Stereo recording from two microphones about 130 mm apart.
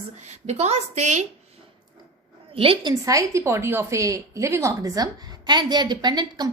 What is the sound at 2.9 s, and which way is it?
A woman's voice, 25° right (ahead or behind).